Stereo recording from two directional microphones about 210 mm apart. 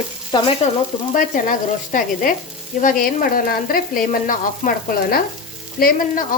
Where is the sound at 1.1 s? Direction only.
40° left (ahead or behind).